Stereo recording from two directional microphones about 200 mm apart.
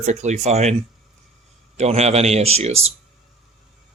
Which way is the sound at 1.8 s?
35° right (ahead or behind).